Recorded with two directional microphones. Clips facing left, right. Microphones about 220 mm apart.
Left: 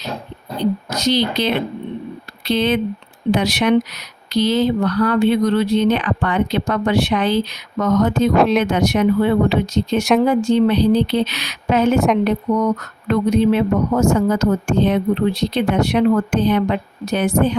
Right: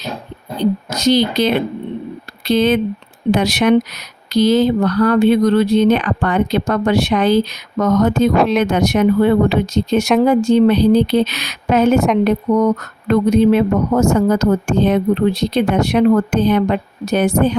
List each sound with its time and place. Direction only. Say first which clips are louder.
0.9 s speech: right 4 dB; 45° right (ahead or behind)
8.4 s speech: even; centre (ahead or behind)
8.6 s speech: right 2 dB; 45° right (ahead or behind)
11.9 s speech: right 2 dB; centre (ahead or behind)
12.2 s speech: right 3 dB; 45° right (ahead or behind)